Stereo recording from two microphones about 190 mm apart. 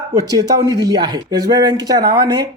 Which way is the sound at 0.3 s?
20° right (ahead or behind).